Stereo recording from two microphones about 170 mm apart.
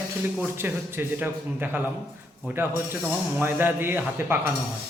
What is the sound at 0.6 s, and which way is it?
A man's voice, 15° right (ahead or behind).